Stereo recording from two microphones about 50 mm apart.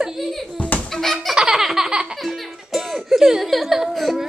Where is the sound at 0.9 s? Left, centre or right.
Centre.